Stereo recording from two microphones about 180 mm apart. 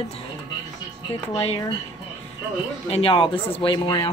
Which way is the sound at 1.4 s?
35° left (ahead or behind).